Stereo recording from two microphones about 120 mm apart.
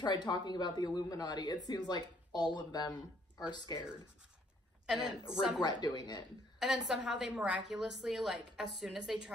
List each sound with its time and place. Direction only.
0.0 s speech: 35° left (ahead or behind)
4.8 s a woman's voice: 5° right (ahead or behind)
5.6 s speech: 35° left (ahead or behind)
6.6 s a woman's voice: 5° right (ahead or behind)